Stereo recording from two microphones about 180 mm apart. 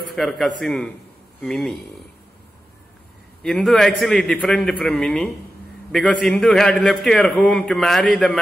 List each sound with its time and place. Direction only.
0.1 s a man's voice: centre (ahead or behind)
3.4 s a man's voice: centre (ahead or behind)